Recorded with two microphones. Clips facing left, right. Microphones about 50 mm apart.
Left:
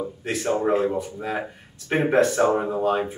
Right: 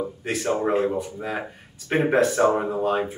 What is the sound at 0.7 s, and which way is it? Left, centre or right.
Speech, centre.